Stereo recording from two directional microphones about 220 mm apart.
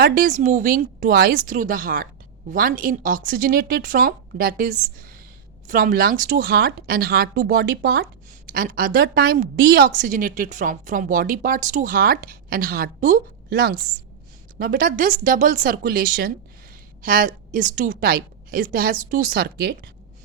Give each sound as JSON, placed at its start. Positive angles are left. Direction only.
{"t": 0.0, "sound": "a woman's voice", "side_deg": -40}